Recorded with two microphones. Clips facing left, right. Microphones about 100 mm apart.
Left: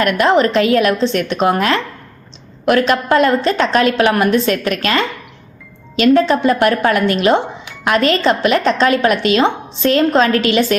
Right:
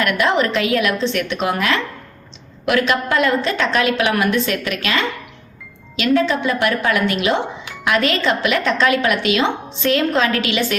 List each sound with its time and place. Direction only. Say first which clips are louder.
0.0 s a woman's voice: left 5 dB; 40° left (ahead or behind)